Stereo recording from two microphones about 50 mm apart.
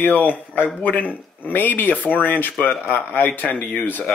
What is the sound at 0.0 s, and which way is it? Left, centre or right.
Speech, left.